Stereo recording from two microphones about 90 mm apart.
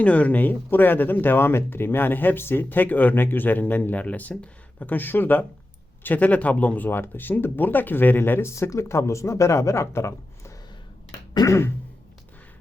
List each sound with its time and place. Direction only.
0.0 s speech: 15° left (ahead or behind); by 10.5 s 30° left (ahead or behind)
11.3 s throat clearing: 40° left (ahead or behind)